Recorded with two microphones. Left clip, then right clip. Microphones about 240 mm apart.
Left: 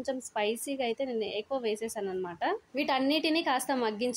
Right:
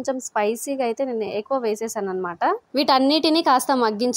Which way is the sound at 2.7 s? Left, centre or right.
Right.